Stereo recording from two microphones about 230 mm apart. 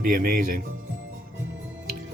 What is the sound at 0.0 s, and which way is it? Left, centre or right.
Speech, right.